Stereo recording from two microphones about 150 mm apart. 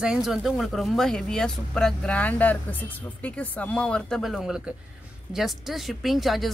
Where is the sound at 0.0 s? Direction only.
5° right (ahead or behind).